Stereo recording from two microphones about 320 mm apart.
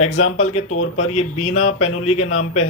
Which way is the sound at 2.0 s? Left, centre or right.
Left.